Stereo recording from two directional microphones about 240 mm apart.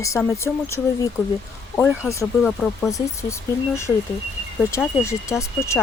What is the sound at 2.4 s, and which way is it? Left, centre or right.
Speech, centre.